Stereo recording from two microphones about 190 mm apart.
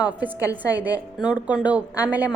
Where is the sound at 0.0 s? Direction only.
10° right (ahead or behind).